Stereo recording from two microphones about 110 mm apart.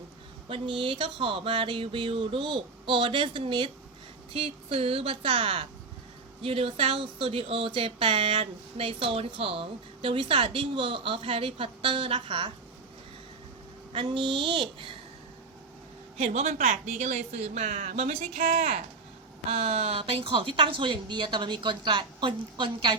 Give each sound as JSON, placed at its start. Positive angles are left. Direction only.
{"t": 0.4, "sound": "speech", "side_deg": -50}
{"t": 4.4, "sound": "speech", "side_deg": -60}
{"t": 13.9, "sound": "speech", "side_deg": -50}
{"t": 16.1, "sound": "speech", "side_deg": -85}
{"t": 19.5, "sound": "speech", "side_deg": -65}